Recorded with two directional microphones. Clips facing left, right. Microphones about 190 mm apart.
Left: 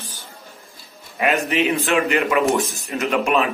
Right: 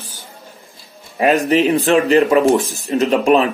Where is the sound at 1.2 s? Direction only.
35° right (ahead or behind).